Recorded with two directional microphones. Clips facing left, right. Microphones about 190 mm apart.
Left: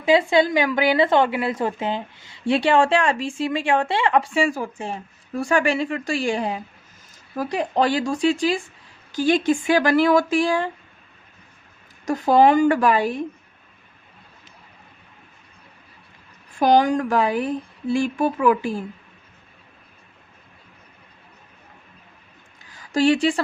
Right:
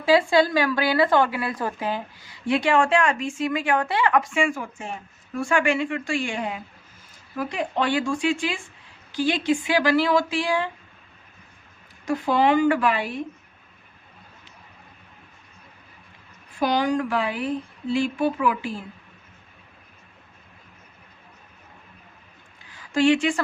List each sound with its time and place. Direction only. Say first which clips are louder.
0.0 s a woman's voice: left 1 dB; 20° left (ahead or behind); by 10.7 s 45° left (ahead or behind)
12.0 s speech: left 5 dB; 45° left (ahead or behind)
16.6 s speech: left 5 dB; 45° left (ahead or behind)
22.7 s speech: left 1 dB; 40° left (ahead or behind)